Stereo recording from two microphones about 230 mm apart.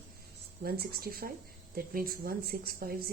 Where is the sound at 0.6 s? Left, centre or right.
Right.